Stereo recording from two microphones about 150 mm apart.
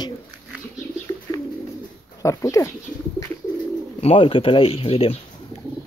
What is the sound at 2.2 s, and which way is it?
Speech, 20° left (ahead or behind).